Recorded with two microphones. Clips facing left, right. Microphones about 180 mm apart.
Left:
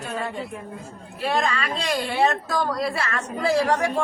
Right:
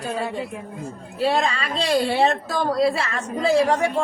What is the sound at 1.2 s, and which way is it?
A woman's voice, 30° right (ahead or behind).